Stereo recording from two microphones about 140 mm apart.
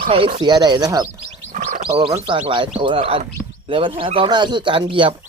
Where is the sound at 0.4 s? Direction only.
30° right (ahead or behind).